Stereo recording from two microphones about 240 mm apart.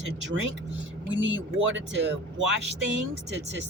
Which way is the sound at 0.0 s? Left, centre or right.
Right.